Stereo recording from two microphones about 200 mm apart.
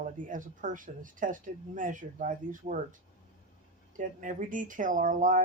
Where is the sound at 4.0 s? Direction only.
40° right (ahead or behind).